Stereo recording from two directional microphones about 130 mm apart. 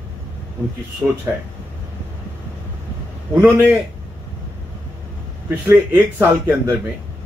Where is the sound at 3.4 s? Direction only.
15° right (ahead or behind).